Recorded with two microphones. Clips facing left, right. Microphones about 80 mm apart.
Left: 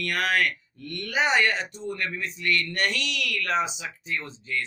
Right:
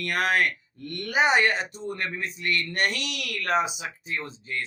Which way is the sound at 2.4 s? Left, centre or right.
Right.